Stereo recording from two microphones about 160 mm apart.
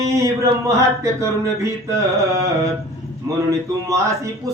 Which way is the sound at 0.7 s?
20° right (ahead or behind).